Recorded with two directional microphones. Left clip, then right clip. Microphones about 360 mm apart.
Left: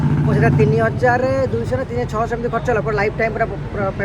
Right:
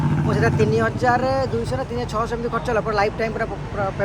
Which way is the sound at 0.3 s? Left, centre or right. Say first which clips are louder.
Left 3 dB; centre.